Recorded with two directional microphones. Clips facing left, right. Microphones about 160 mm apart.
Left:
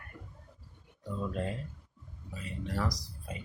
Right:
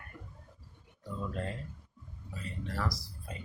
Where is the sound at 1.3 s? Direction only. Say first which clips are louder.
Left 3 dB; 15° left (ahead or behind).